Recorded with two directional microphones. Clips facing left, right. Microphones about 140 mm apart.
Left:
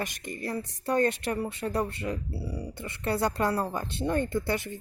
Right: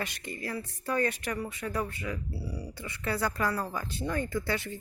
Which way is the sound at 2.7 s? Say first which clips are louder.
Left 4 dB; 25° left (ahead or behind).